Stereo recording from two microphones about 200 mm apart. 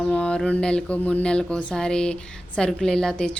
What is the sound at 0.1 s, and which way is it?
A woman's voice, 5° left (ahead or behind).